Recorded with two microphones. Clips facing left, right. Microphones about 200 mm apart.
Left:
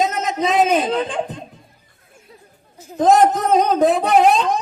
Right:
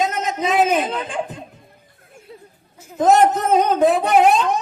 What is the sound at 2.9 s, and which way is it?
Speech, 35° left (ahead or behind).